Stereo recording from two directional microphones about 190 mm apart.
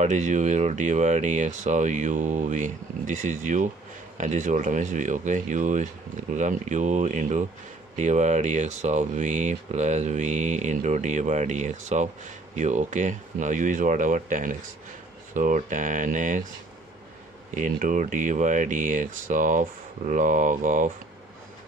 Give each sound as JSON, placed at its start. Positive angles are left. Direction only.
{"t": 0.0, "sound": "speech", "side_deg": -40}
{"t": 17.6, "sound": "speech", "side_deg": -45}